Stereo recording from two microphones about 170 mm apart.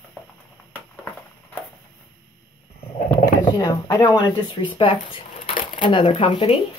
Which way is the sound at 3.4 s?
25° left (ahead or behind).